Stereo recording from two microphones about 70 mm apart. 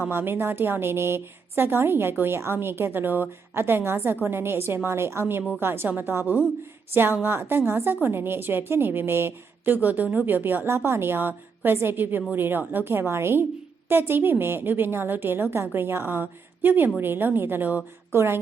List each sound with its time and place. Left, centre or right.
0.0 s a woman's voice: right
18.1 s a woman's voice: right